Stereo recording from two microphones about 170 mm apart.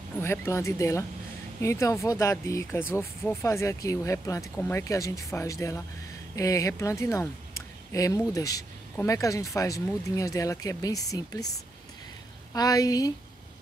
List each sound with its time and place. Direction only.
0.2 s speech: 15° left (ahead or behind)
12.5 s speech: 20° left (ahead or behind)